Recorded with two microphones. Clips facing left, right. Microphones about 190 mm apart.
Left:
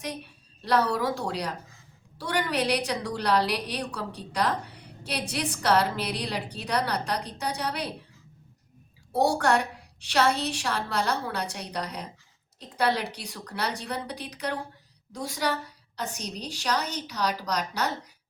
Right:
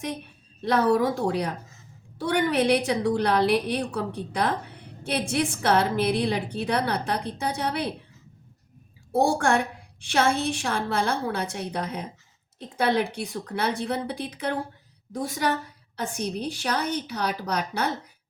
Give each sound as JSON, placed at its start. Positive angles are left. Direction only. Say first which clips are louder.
{"t": 0.6, "sound": "a woman's voice", "louder": "right 4 dB", "side_deg": -50}
{"t": 9.1, "sound": "a woman's voice", "louder": "right 2 dB", "side_deg": -50}